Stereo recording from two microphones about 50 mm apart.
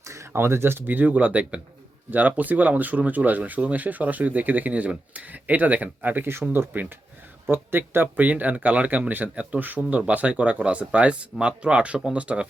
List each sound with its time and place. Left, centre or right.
0.0 s a sound: right
0.3 s speech: right
9.6 s speech: right
10.1 s speech: right